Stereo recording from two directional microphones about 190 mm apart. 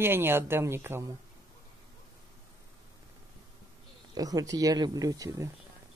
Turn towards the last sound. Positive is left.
turn(degrees=-20)  # may be behind; listen again after turning